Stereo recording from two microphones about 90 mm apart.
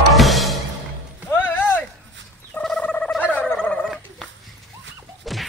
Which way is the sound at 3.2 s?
20° left (ahead or behind).